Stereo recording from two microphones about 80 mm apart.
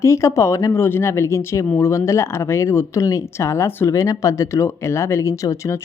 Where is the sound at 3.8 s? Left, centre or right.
Left.